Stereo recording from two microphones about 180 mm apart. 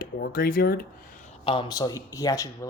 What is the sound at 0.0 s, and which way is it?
Speech, 55° left (ahead or behind).